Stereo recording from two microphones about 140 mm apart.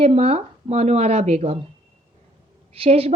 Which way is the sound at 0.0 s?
45° right (ahead or behind).